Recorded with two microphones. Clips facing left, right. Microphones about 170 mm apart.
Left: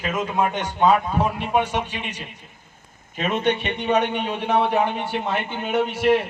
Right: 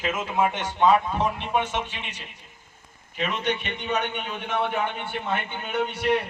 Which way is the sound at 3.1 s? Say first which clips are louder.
Left 5 dB; 45° left (ahead or behind).